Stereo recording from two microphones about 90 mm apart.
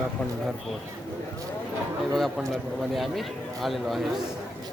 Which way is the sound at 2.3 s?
Centre (ahead or behind).